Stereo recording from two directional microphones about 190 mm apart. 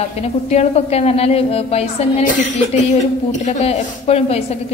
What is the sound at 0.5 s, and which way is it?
A woman's voice, 35° left (ahead or behind).